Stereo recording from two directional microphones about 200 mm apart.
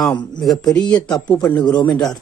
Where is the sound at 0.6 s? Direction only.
5° left (ahead or behind).